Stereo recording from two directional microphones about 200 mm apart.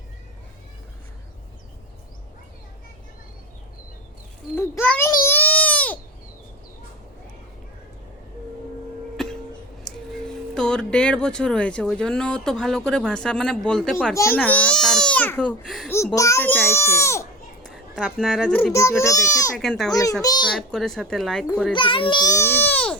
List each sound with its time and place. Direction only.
4.5 s a sound: 15° left (ahead or behind)
9.2 s music: centre (ahead or behind)
9.9 s a sound: centre (ahead or behind)
10.5 s speech: 5° left (ahead or behind)
15.9 s a child's voice: 15° left (ahead or behind)
17.7 s a child's voice: centre (ahead or behind); by 19.5 s 15° left (ahead or behind)
19.5 s speech: centre (ahead or behind)
20.2 s a child's voice: 20° left (ahead or behind)
20.6 s speech: centre (ahead or behind)
21.8 s a child's voice: 25° left (ahead or behind); by 23.0 s 10° left (ahead or behind)